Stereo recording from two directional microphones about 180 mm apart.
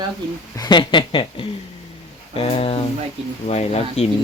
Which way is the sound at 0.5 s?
20° left (ahead or behind).